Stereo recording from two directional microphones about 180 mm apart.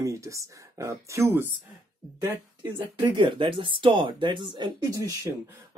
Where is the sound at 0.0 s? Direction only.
15° right (ahead or behind).